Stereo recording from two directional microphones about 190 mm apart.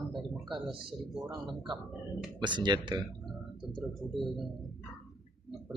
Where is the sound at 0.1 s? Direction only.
Centre (ahead or behind).